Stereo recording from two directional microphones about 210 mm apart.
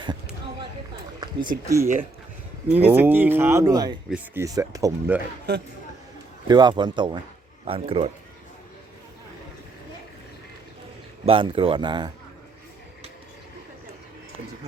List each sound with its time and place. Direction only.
1.2 s speech: 20° right (ahead or behind)
6.5 s speech: 20° right (ahead or behind)
11.3 s speech: 25° right (ahead or behind)